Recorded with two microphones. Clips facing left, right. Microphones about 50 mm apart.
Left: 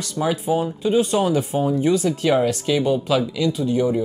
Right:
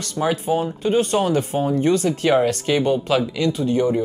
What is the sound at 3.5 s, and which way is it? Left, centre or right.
Speech, right.